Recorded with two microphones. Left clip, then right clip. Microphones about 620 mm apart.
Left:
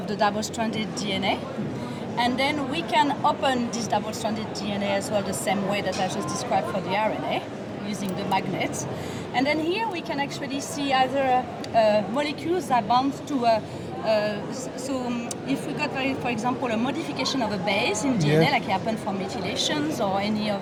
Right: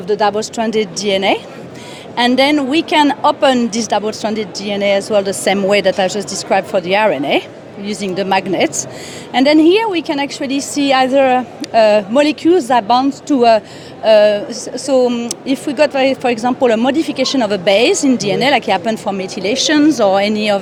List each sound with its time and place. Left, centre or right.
0.1 s a woman's voice: right
14.0 s a woman's voice: right